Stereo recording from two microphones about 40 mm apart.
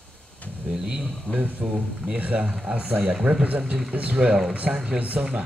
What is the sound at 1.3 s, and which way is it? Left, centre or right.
Speech, right.